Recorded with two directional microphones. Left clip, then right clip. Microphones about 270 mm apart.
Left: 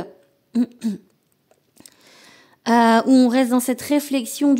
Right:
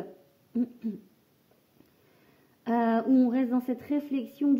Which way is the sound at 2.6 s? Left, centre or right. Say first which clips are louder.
Left 12 dB; left.